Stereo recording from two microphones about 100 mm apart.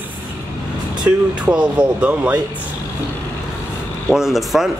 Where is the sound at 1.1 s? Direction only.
10° right (ahead or behind).